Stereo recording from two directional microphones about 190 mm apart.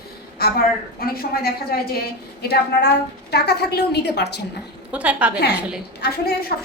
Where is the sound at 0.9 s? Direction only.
55° left (ahead or behind).